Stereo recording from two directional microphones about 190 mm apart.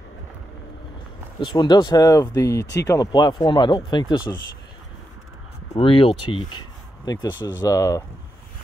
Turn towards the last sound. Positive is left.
turn(degrees=15)  # may be behind; listen again after turning